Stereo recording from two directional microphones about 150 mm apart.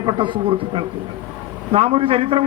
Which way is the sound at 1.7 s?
40° right (ahead or behind).